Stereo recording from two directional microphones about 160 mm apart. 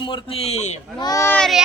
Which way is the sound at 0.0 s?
30° left (ahead or behind).